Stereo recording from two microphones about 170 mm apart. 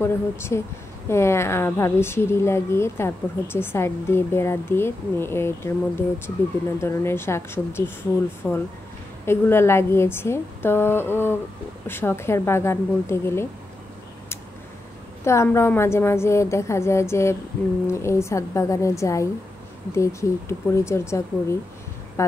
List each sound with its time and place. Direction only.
0.0 s a woman's voice: 15° left (ahead or behind)
15.2 s a woman's voice: 15° left (ahead or behind)